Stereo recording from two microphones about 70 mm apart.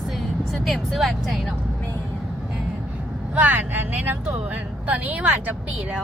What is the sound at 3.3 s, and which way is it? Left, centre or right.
Vehicle, right.